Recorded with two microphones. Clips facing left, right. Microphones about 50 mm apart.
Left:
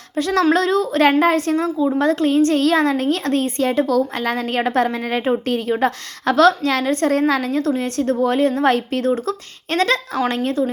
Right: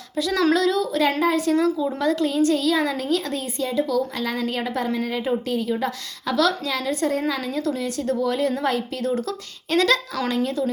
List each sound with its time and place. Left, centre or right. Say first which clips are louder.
0.2 s a woman's voice: left 3 dB; left
1.5 s speech: left 2 dB; left
2.0 s a woman's voice: left 6 dB; left